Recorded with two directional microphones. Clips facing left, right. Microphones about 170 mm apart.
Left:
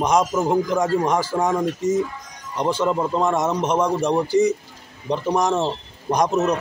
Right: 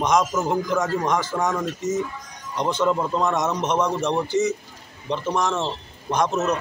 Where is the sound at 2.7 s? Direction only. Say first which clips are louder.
Left 1 dB; 10° left (ahead or behind).